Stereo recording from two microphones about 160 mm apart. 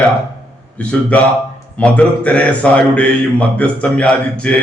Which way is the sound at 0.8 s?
10° left (ahead or behind).